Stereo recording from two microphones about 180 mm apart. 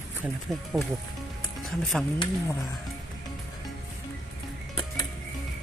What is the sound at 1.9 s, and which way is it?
Speech, centre (ahead or behind).